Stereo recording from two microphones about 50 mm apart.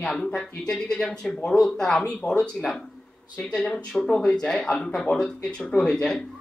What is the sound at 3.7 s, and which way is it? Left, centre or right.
A man's voice, centre.